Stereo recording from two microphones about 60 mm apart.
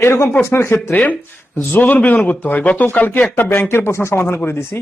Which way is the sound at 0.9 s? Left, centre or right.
Left.